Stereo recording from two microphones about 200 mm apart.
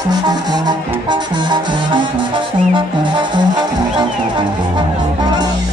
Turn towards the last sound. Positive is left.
turn(degrees=-25)  # may be behind; listen again after turning